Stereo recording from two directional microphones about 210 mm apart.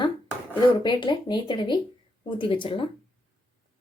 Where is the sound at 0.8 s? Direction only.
20° left (ahead or behind).